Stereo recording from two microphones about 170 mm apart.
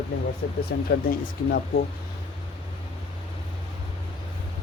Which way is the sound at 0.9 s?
60° left (ahead or behind).